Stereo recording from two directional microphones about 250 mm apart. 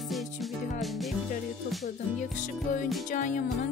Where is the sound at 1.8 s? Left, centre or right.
Left.